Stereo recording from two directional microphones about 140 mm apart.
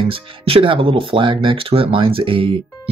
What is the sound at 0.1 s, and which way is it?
Speech, 40° right (ahead or behind).